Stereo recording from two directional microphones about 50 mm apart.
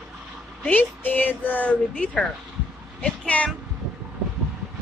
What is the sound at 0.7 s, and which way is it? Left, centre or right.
Speech, left.